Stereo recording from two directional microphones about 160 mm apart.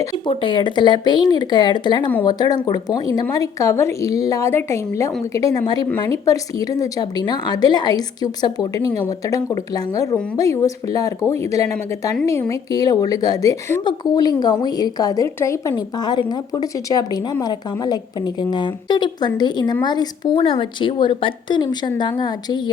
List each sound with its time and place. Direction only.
0.3 s a woman's voice: 30° left (ahead or behind)